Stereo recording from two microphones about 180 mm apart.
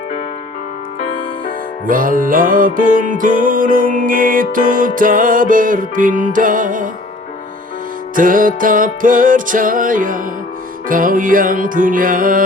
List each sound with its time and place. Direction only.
1.9 s music: 50° right (ahead or behind)
8.1 s music: 50° right (ahead or behind)